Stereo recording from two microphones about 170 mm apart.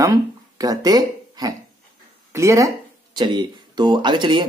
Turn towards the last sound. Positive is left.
turn(degrees=-30)  # may be behind; listen again after turning